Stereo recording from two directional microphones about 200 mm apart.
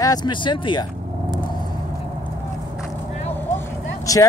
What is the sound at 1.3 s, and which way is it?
Vehicle, 20° left (ahead or behind).